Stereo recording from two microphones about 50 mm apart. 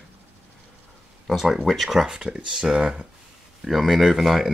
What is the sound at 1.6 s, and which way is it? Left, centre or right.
Speech, centre.